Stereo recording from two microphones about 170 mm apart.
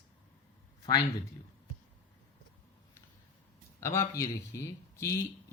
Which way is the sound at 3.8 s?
15° left (ahead or behind).